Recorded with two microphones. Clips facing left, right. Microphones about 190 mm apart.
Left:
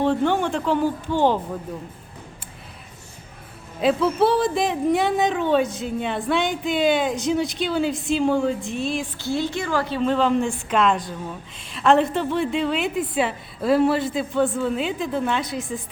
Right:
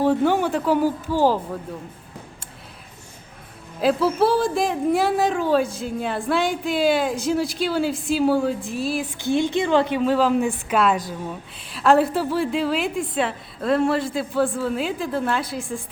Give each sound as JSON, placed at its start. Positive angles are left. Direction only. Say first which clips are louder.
{"t": 0.0, "sound": "speech", "louder": "right 2 dB", "side_deg": -10}
{"t": 3.8, "sound": "a woman's voice", "louder": "even", "side_deg": 0}
{"t": 9.1, "sound": "a woman's voice", "louder": "right 4 dB", "side_deg": -20}
{"t": 10.0, "sound": "a woman's voice", "louder": "right 1 dB", "side_deg": -5}